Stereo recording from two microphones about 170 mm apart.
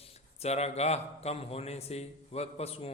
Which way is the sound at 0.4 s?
40° left (ahead or behind).